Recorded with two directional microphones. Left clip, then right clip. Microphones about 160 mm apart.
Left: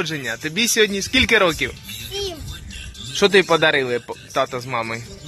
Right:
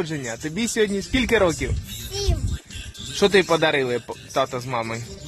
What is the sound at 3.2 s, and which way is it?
Speech, 10° right (ahead or behind).